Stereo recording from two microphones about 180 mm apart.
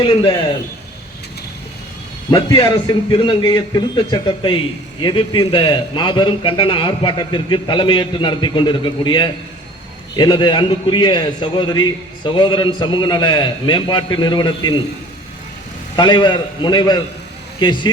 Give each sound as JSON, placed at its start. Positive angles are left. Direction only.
{"t": 2.3, "sound": "a man's voice", "side_deg": 25}
{"t": 16.0, "sound": "a man's voice", "side_deg": 25}